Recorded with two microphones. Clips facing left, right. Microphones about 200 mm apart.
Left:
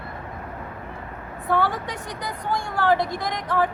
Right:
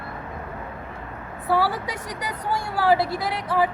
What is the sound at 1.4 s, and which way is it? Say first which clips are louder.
A woman's voice: right 1 dB; 5° right (ahead or behind).